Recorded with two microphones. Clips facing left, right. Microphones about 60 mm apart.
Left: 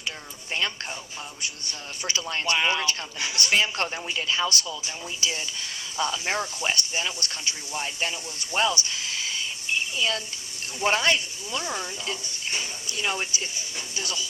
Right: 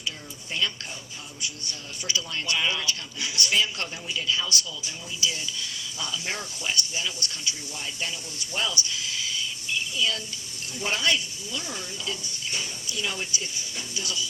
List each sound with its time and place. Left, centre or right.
0.6 s a man's voice: left
2.0 s a man's voice: left
8.5 s a sound: left
10.8 s a man's voice: left